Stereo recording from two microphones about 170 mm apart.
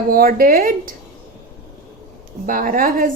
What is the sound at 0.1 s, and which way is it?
Speech, 60° right (ahead or behind).